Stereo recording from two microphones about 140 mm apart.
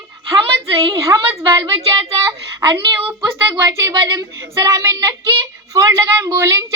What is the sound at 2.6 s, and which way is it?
Speech, 35° right (ahead or behind).